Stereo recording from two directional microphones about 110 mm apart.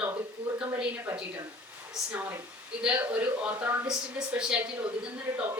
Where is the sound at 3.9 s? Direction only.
5° right (ahead or behind).